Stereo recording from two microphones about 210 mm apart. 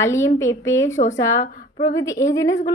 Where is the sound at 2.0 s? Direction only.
15° left (ahead or behind).